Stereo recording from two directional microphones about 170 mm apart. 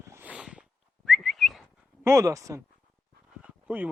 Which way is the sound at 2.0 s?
15° right (ahead or behind).